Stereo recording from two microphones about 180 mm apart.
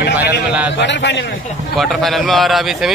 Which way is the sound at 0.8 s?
80° left.